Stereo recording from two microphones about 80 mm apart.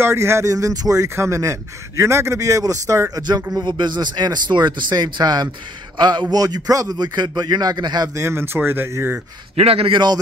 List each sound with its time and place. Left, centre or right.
0.0 s speech: right
3.2 s speech: right
3.6 s speech: right
6.3 s speech: right
8.1 s speech: right
9.9 s speech: right